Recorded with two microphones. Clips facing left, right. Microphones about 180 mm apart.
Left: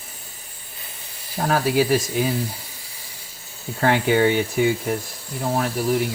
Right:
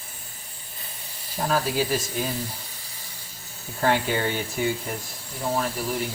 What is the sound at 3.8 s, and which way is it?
Speech, 65° left (ahead or behind).